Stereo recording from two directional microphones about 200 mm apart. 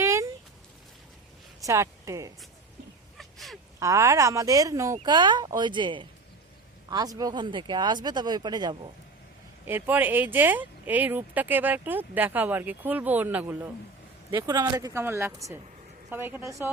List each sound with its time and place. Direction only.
0.0 s a sound: 15° right (ahead or behind)
1.6 s speech: 15° right (ahead or behind)
3.2 s crow: centre (ahead or behind)
3.8 s speech: 15° right (ahead or behind)
9.6 s speech: 10° right (ahead or behind)